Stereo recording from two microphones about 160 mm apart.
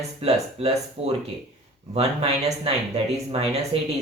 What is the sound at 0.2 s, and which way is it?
Speech, 40° right (ahead or behind).